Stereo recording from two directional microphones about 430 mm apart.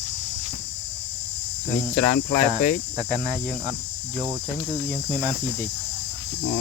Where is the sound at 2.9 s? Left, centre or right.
Centre.